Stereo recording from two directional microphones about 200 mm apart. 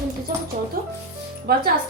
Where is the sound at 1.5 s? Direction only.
50° right (ahead or behind).